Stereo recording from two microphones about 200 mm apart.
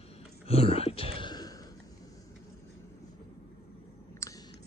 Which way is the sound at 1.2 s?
20° left (ahead or behind).